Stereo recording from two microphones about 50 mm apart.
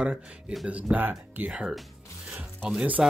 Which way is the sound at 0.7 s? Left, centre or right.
Right.